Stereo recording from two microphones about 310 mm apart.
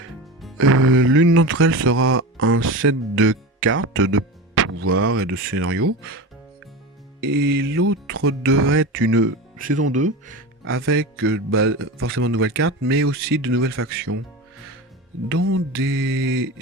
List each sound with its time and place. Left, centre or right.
0.5 s speech: right
7.3 s speech: right
9.8 s speech: right
10.6 s speech: right
15.3 s speech: right